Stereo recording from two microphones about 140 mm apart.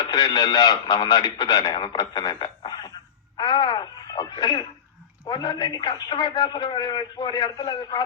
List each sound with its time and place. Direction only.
0.0 s a man's voice: 30° left (ahead or behind)
3.3 s music: 30° left (ahead or behind)
5.2 s a man's voice: 30° left (ahead or behind)